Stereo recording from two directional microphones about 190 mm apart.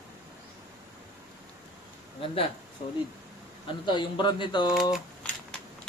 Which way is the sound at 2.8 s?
35° left (ahead or behind).